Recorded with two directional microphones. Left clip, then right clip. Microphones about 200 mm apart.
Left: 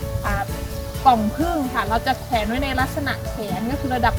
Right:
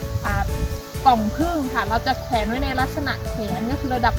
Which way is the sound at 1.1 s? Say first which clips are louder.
Left 1 dB; 5° left (ahead or behind).